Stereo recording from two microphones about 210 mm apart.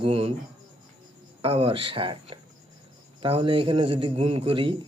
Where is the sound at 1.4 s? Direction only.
25° right (ahead or behind).